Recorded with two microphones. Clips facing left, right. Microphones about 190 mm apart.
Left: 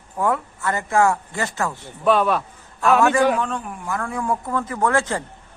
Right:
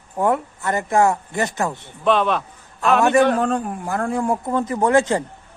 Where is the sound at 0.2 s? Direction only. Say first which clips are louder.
Right 2 dB; 20° right (ahead or behind).